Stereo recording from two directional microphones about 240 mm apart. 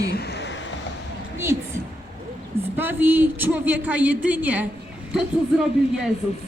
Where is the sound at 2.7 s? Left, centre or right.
Centre.